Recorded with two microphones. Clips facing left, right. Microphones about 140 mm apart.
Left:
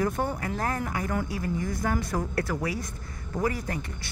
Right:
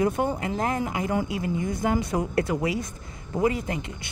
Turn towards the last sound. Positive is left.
turn(degrees=-20)  # may be behind; listen again after turning